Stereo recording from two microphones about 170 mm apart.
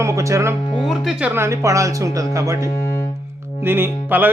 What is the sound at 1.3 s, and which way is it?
Speech, 15° right (ahead or behind).